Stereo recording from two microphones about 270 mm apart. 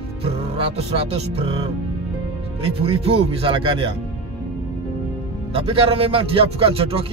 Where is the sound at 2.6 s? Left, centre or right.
Right.